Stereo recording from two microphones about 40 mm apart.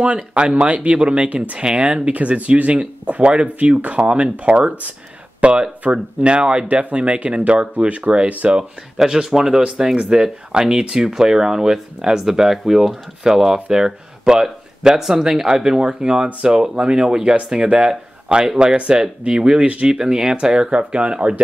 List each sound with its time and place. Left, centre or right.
0.0 s speech: right
8.9 s speech: centre
9.9 s speech: right
19.9 s speech: centre